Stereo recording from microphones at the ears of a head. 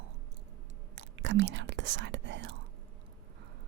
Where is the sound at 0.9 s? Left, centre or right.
Right.